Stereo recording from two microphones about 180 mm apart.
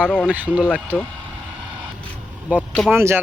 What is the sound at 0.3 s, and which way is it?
Speech, 10° right (ahead or behind).